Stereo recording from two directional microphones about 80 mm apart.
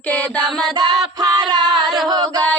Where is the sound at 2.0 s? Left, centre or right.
Right.